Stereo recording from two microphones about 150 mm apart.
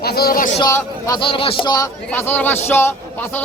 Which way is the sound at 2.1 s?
10° left (ahead or behind).